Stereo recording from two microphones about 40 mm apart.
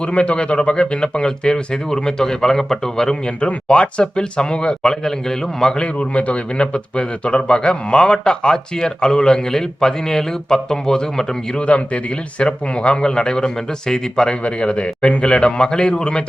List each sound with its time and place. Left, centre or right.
0.0 s a man's voice: left
3.4 s a man's voice: left; by 5.8 s centre
5.8 s a man's voice: left
11.5 s a man's voice: left